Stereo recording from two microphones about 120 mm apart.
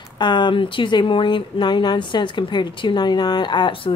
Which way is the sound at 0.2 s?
40° left (ahead or behind).